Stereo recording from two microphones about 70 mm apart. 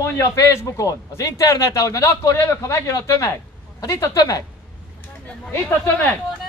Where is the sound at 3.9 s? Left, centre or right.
Left.